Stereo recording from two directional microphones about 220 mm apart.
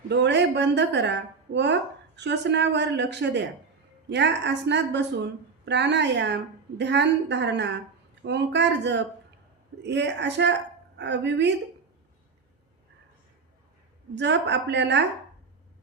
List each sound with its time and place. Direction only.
0.1 s a woman's voice: 50° right (ahead or behind)
14.2 s a woman's voice: 50° right (ahead or behind)